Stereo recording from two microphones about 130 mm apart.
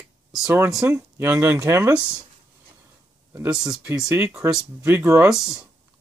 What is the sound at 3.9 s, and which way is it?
Speech, 20° right (ahead or behind).